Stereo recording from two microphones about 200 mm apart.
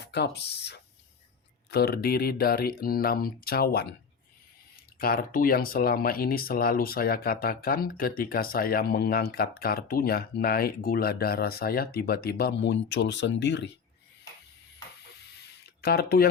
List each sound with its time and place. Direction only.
0.0 s speech: 55° left (ahead or behind)
4.9 s speech: 45° left (ahead or behind)
15.8 s speech: 50° left (ahead or behind)